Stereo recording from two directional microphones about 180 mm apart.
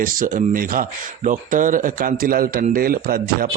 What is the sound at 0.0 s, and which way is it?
Speech, 50° right (ahead or behind).